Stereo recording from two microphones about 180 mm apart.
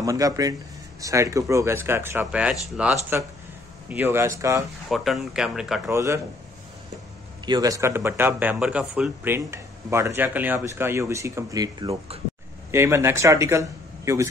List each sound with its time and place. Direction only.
0.0 s a man's voice: 20° right (ahead or behind)
4.8 s speech: centre (ahead or behind)
5.9 s a man's voice: 15° right (ahead or behind)
7.4 s a man's voice: 20° right (ahead or behind)